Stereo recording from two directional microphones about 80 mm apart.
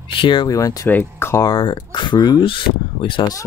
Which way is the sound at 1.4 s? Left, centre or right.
Left.